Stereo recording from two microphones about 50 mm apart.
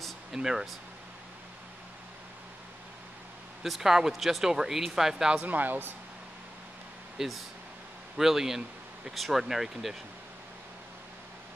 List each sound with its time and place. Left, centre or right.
0.3 s speech: centre
3.6 s speech: centre
5.4 s speech: right
7.2 s speech: centre